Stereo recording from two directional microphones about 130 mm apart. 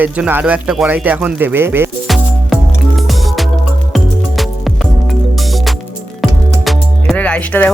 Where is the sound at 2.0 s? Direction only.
Centre (ahead or behind).